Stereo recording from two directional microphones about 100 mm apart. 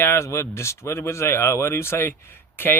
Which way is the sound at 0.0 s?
25° left (ahead or behind).